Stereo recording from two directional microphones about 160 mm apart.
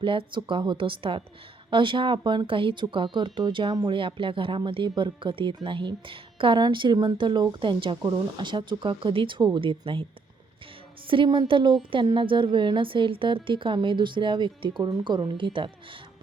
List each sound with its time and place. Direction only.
0.0 s speech: 30° right (ahead or behind)